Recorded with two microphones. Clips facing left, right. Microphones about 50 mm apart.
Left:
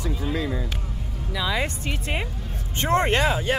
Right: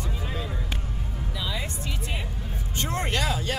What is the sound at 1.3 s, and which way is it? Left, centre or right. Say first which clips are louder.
Speech: left 8 dB; left.